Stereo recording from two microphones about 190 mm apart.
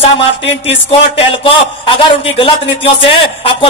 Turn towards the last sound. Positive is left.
turn(degrees=30)  # may be behind; listen again after turning